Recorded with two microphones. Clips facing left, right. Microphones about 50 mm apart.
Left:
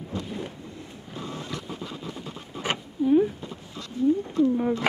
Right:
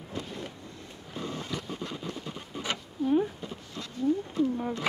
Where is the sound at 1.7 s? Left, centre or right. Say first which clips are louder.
Left 1 dB; centre.